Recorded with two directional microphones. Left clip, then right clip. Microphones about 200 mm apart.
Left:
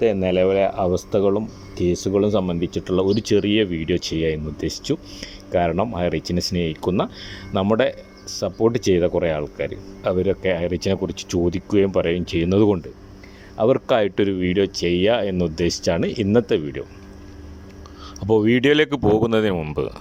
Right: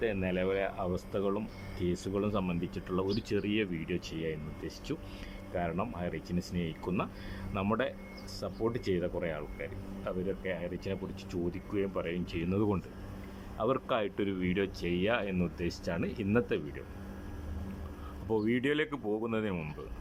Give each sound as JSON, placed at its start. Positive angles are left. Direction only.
{"t": 0.0, "sound": "speech", "side_deg": 45}
{"t": 4.9, "sound": "speech", "side_deg": 35}
{"t": 5.5, "sound": "speech", "side_deg": 50}
{"t": 14.3, "sound": "speech", "side_deg": 30}
{"t": 18.3, "sound": "speech", "side_deg": 55}